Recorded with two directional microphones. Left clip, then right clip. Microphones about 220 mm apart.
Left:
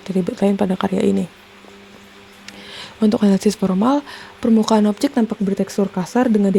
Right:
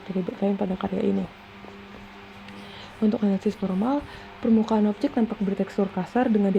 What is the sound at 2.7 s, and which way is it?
Speech, 55° left (ahead or behind).